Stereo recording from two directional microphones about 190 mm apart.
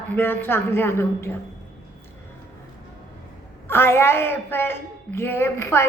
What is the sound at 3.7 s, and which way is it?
A woman's voice, 10° left (ahead or behind).